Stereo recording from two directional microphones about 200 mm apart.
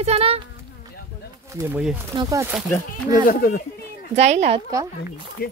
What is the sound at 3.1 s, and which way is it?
Speech, 45° left (ahead or behind).